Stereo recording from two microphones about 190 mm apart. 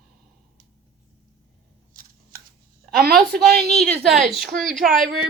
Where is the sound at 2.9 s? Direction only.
50° right (ahead or behind).